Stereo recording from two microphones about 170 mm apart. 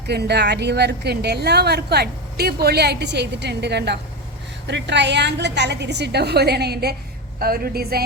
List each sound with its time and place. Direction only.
0.1 s a woman's voice: 75° right (ahead or behind)